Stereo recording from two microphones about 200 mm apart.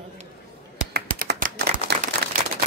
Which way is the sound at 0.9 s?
50° right (ahead or behind).